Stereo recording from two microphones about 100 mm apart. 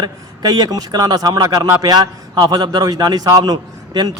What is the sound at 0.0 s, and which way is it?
A man's voice, 45° right (ahead or behind).